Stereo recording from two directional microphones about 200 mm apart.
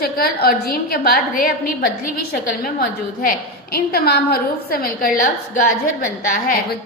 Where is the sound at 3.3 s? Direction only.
50° left (ahead or behind).